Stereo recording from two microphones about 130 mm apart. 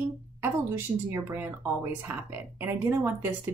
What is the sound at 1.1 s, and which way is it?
A woman's voice, 15° right (ahead or behind).